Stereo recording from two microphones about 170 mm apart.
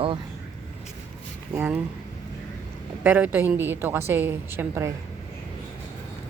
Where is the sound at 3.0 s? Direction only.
10° right (ahead or behind).